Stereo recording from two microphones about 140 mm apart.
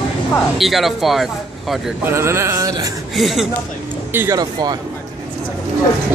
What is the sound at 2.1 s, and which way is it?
Speech, 20° right (ahead or behind).